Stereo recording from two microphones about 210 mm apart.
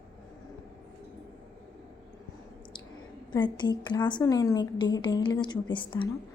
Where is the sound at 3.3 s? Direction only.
20° left (ahead or behind).